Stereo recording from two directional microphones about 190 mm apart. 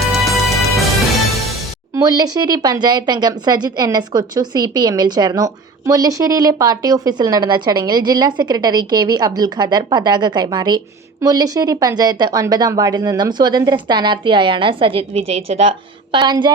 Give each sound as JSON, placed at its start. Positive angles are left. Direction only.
{"t": 0.0, "sound": "music", "side_deg": 0}
{"t": 2.0, "sound": "speech", "side_deg": -20}